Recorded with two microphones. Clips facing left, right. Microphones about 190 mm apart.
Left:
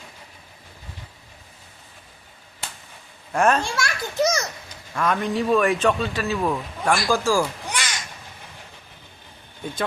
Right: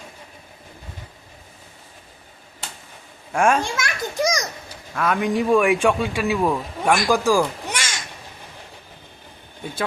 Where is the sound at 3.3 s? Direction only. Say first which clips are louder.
Right 1 dB; 10° right (ahead or behind).